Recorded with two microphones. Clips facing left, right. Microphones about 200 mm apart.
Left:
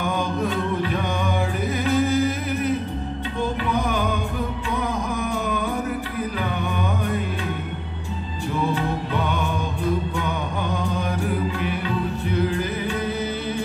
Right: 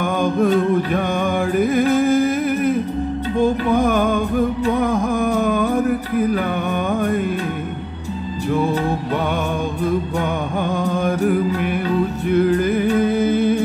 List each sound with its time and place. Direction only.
0.0 s music: 50° right (ahead or behind)
3.7 s music: 50° right (ahead or behind)
8.7 s music: 45° right (ahead or behind)